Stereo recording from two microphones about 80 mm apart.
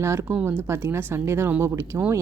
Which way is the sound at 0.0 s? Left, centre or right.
Right.